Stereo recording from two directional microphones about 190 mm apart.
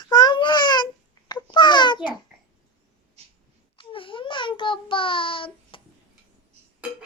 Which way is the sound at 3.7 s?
25° left (ahead or behind).